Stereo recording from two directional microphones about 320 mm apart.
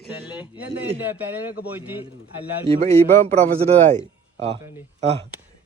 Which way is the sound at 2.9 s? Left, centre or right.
Centre.